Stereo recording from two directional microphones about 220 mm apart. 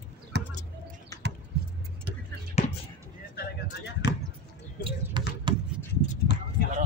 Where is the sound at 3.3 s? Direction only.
50° left (ahead or behind).